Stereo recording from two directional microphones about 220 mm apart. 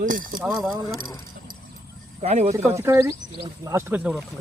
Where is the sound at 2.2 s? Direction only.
30° right (ahead or behind).